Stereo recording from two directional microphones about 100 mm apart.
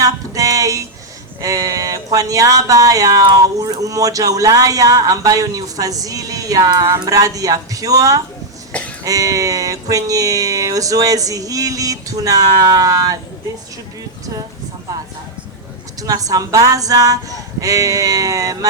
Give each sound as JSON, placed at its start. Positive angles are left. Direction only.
{"t": 0.0, "sound": "music", "side_deg": -35}
{"t": 1.4, "sound": "speech", "side_deg": -35}
{"t": 8.7, "sound": "a sound", "side_deg": 15}
{"t": 9.0, "sound": "speech", "side_deg": -35}
{"t": 16.0, "sound": "speech", "side_deg": -35}